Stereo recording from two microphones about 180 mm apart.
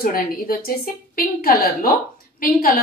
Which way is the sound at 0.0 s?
55° left (ahead or behind).